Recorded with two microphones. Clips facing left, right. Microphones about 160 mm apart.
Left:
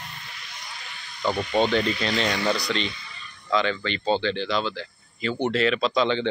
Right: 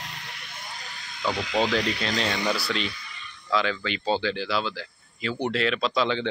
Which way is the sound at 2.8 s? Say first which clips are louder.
Left 1 dB; 30° left (ahead or behind).